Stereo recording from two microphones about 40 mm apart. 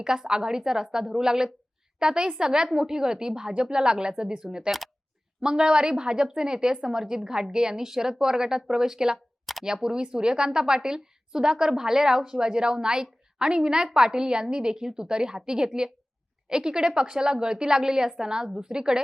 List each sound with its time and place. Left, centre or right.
0.0 s a woman's voice: centre
9.1 s a sound: centre
9.7 s a woman's voice: centre